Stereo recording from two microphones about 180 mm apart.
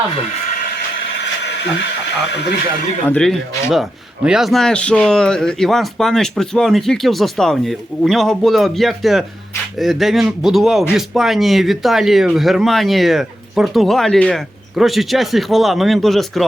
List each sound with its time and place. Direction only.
2.3 s speech: 70° left (ahead or behind)
3.1 s a man's voice: 5° left (ahead or behind)